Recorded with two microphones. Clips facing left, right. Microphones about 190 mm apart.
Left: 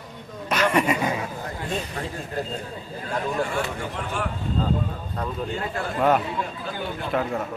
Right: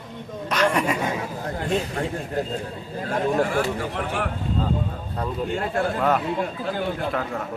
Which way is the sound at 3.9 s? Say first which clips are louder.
Right 3 dB; 60° right (ahead or behind).